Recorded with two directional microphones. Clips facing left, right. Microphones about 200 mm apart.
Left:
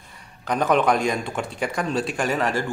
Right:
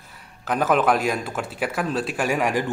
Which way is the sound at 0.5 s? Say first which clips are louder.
Even; 5° right (ahead or behind).